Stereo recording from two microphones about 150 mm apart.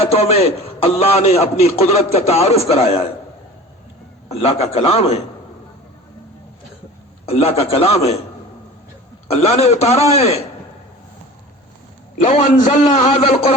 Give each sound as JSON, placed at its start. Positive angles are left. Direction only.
{"t": 0.0, "sound": "a man's voice", "side_deg": 40}
{"t": 4.3, "sound": "a man's voice", "side_deg": 45}
{"t": 7.3, "sound": "a man's voice", "side_deg": 40}
{"t": 9.2, "sound": "a man's voice", "side_deg": 45}
{"t": 12.2, "sound": "a man's voice", "side_deg": 50}